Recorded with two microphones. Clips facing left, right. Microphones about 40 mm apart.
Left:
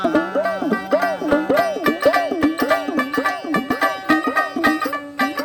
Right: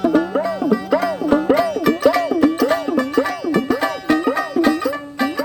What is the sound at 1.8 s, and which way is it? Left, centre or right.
Music, centre.